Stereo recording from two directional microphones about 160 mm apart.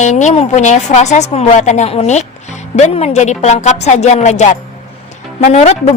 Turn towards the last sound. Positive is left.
turn(degrees=45)  # may be behind; listen again after turning